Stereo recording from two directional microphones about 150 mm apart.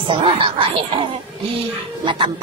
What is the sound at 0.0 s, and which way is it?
Speech, 35° right (ahead or behind).